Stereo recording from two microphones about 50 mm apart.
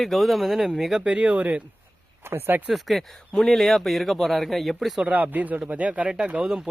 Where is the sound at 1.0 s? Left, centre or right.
Right.